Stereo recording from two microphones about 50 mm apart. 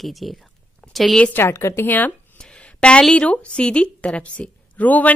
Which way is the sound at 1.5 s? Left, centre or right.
Left.